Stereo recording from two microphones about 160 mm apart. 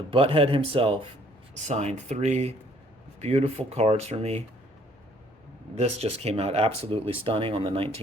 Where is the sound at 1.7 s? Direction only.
45° right (ahead or behind).